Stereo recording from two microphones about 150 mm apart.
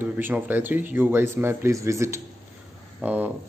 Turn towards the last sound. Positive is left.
turn(degrees=-10)  # may be behind; listen again after turning